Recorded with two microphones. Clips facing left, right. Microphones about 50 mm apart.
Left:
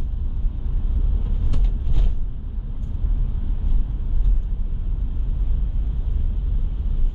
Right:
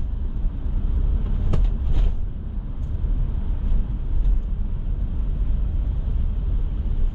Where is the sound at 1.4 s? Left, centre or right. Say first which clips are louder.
Right 3 dB; right.